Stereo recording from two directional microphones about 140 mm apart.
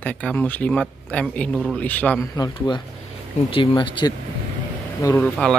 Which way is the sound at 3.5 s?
35° left (ahead or behind).